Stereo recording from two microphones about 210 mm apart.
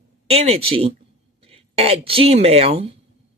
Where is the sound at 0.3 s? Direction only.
30° right (ahead or behind).